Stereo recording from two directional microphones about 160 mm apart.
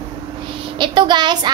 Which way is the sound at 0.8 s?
30° right (ahead or behind).